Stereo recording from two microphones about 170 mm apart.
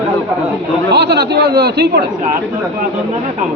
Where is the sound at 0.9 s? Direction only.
75° right (ahead or behind).